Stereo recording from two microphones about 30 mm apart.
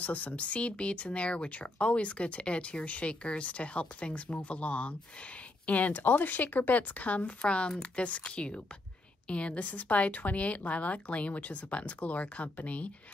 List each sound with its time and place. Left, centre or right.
0.0 s speech: left
7.4 s speech: left
9.3 s speech: left